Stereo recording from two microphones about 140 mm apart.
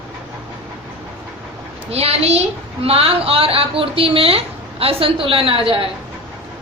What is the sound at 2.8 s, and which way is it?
A woman's voice, 45° right (ahead or behind).